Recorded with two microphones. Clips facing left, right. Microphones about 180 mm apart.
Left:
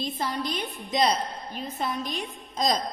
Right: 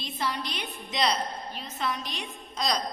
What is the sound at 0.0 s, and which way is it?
A woman's voice, 50° left (ahead or behind).